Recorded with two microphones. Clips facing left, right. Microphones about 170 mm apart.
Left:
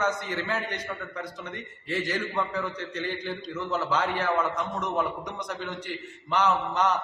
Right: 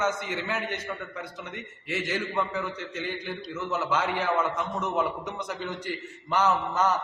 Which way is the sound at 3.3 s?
10° right (ahead or behind).